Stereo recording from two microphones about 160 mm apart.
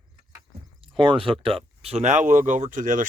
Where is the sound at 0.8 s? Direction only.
35° right (ahead or behind).